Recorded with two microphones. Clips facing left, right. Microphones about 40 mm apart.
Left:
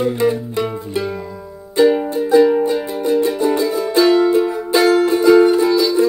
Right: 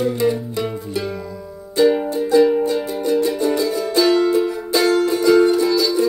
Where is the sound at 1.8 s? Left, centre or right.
Centre.